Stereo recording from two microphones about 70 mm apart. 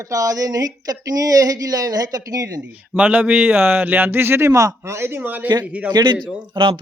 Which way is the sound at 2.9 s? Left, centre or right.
Right.